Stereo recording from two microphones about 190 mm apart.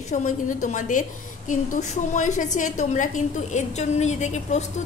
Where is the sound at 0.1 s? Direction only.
40° left (ahead or behind).